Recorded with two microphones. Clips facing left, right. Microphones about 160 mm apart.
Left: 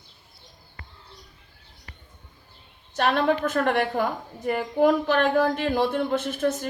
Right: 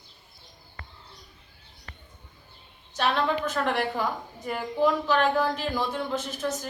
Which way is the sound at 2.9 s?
50° left (ahead or behind).